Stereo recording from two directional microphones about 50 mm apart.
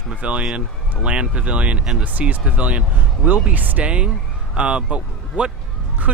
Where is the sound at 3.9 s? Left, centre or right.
Right.